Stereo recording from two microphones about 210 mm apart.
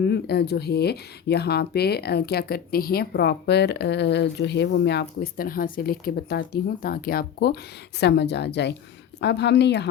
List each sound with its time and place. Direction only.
0.0 s speech: 50° left (ahead or behind)